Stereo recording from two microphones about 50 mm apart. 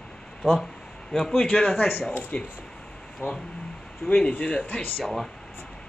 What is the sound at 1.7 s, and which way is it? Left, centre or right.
Speech, left.